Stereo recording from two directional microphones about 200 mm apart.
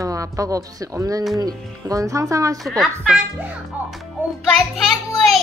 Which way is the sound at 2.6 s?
Centre (ahead or behind).